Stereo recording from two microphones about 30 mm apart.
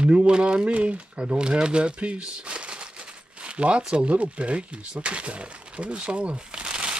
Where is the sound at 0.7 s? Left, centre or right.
Right.